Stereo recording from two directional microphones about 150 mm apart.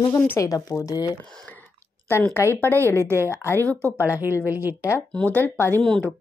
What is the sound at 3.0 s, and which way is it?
Speech, 15° right (ahead or behind).